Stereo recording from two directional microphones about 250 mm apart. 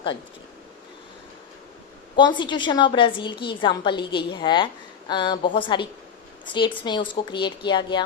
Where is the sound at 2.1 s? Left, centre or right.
Centre.